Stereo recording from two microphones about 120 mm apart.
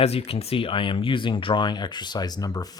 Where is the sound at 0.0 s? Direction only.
60° left (ahead or behind).